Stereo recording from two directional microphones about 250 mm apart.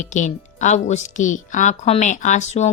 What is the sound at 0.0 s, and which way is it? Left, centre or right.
A woman's voice, left.